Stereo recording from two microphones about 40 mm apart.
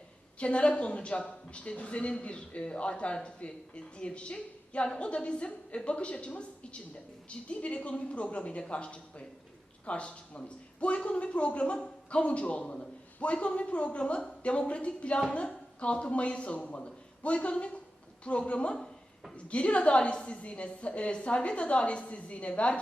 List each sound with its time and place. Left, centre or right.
0.3 s a woman's voice: left